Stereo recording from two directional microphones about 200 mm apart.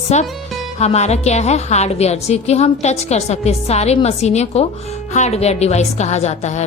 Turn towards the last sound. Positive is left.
turn(degrees=35)  # may be behind; listen again after turning